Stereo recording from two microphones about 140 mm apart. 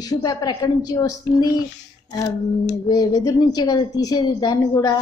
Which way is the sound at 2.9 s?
30° left (ahead or behind).